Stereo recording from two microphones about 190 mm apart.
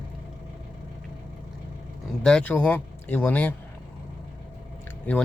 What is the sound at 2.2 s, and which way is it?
Speech, 5° left (ahead or behind).